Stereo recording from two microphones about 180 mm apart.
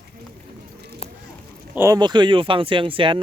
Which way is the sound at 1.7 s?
15° right (ahead or behind).